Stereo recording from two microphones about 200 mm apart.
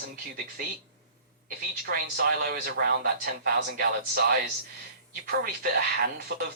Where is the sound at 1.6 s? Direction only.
50° right (ahead or behind).